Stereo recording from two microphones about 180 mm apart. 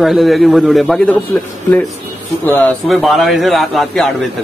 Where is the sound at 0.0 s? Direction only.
Centre (ahead or behind).